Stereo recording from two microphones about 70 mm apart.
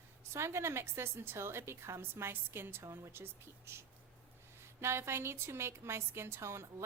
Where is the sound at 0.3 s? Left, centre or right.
Right.